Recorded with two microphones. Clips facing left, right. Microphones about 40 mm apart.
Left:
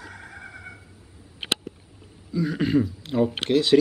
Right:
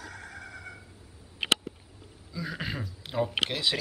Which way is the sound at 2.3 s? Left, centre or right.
Centre.